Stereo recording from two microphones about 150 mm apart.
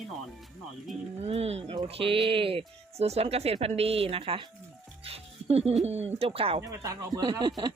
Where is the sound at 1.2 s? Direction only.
45° right (ahead or behind).